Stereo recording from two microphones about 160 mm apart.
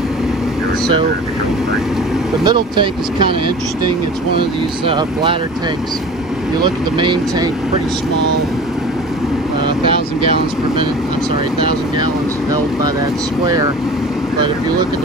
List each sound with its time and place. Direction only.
2.4 s speech: 30° right (ahead or behind)
4.8 s speech: 30° right (ahead or behind)
6.6 s speech: 30° right (ahead or behind)